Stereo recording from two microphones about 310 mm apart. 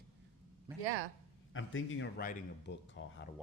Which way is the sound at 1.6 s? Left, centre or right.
Left.